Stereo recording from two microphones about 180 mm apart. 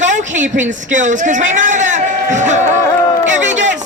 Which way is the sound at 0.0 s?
45° right (ahead or behind).